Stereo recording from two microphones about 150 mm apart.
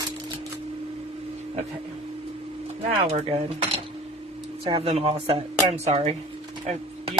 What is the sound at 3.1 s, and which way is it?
Speech, 45° right (ahead or behind).